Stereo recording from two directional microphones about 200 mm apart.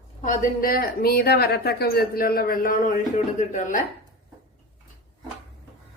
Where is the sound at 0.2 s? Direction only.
45° left (ahead or behind).